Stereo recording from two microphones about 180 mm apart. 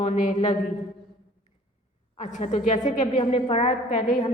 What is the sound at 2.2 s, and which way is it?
A woman's voice, 40° left (ahead or behind).